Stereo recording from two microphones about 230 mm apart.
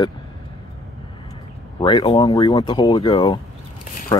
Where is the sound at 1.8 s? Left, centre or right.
Centre.